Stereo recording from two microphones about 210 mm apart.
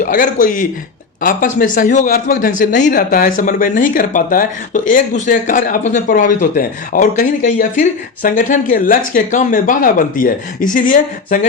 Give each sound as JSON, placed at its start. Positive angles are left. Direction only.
{"t": 0.0, "sound": "a man's voice", "side_deg": 40}